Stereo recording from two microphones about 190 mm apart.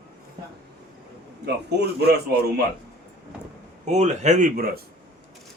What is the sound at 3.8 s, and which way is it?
Speech, 40° right (ahead or behind).